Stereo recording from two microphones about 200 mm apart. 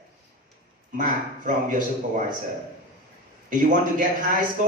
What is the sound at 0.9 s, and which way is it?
Speech, 40° right (ahead or behind).